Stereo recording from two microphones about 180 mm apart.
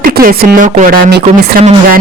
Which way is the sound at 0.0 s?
55° right (ahead or behind).